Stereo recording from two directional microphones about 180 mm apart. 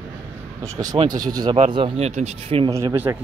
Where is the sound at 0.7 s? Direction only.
20° right (ahead or behind).